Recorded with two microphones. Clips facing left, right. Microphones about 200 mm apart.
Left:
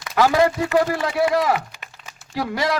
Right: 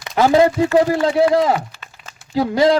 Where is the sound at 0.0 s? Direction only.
25° right (ahead or behind).